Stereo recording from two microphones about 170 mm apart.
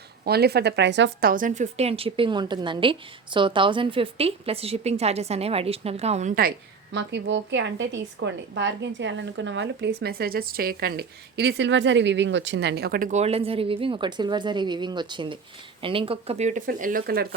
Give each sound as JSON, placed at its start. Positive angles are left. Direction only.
{"t": 0.3, "sound": "speech", "side_deg": -70}
{"t": 1.3, "sound": "a woman's voice", "side_deg": -50}
{"t": 6.9, "sound": "a woman's voice", "side_deg": -90}
{"t": 13.1, "sound": "a woman's voice", "side_deg": -40}
{"t": 16.6, "sound": "speech", "side_deg": -55}